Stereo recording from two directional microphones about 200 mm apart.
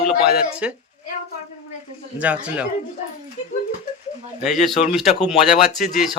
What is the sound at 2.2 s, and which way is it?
Speech, 5° right (ahead or behind).